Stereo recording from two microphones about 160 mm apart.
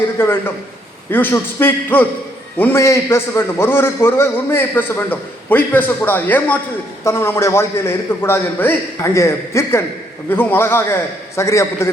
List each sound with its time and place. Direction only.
0.2 s a man's voice: 15° left (ahead or behind)